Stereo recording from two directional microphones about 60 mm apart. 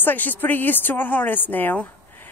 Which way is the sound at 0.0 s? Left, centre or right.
Left.